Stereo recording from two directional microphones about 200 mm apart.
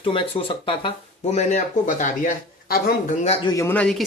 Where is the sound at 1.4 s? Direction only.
35° left (ahead or behind).